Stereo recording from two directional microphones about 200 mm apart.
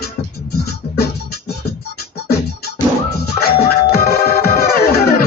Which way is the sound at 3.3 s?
50° left (ahead or behind).